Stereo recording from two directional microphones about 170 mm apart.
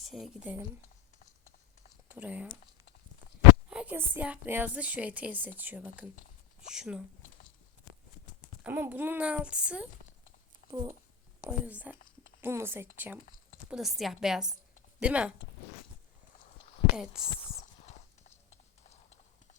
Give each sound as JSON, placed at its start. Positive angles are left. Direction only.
{"t": 0.0, "sound": "speech", "side_deg": 0}
{"t": 1.9, "sound": "a sound", "side_deg": -5}
{"t": 3.7, "sound": "a woman's voice", "side_deg": -10}
{"t": 8.6, "sound": "a woman's voice", "side_deg": -10}
{"t": 10.7, "sound": "speech", "side_deg": -20}
{"t": 11.4, "sound": "a woman's voice", "side_deg": -10}
{"t": 13.7, "sound": "a woman's voice", "side_deg": 0}
{"t": 16.9, "sound": "a woman's voice", "side_deg": -5}
{"t": 17.8, "sound": "clip-clop", "side_deg": 40}